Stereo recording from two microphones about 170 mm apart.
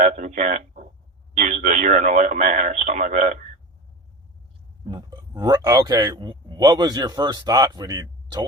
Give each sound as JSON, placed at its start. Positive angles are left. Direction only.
{"t": 0.0, "sound": "speech", "side_deg": -45}
{"t": 4.9, "sound": "speech", "side_deg": -25}